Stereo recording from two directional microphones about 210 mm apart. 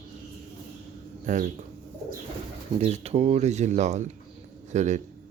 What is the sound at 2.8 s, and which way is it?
Speech, 30° right (ahead or behind).